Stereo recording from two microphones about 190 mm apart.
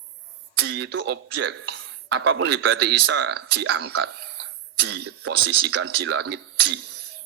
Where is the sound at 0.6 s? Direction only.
65° right (ahead or behind).